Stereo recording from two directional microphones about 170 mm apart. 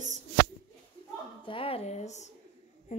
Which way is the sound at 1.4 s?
30° left (ahead or behind).